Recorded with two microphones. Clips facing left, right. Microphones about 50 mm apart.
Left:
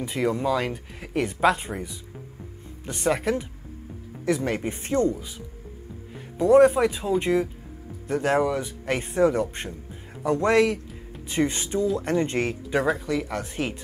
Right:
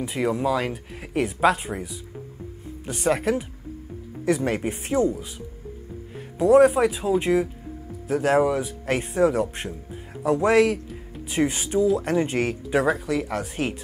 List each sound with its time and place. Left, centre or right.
0.0 s a man's voice: centre